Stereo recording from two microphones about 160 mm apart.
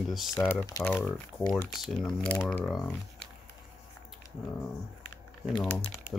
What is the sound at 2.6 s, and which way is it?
Speech, 5° left (ahead or behind).